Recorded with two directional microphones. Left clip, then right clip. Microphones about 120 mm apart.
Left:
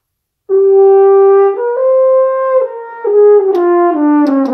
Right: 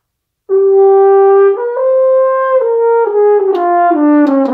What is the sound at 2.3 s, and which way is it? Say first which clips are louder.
French horn: right 2 dB; 35° left (ahead or behind).